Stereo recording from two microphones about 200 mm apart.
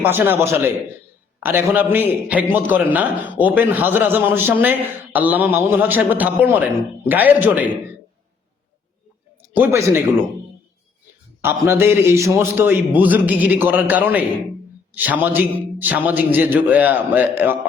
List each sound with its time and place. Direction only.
0.0 s a man's voice: 10° right (ahead or behind)
9.6 s a man's voice: 15° right (ahead or behind)
11.4 s a man's voice: 10° right (ahead or behind)